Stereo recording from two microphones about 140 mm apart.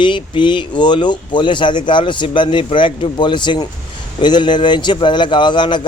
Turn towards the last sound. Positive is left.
turn(degrees=35)  # may be behind; listen again after turning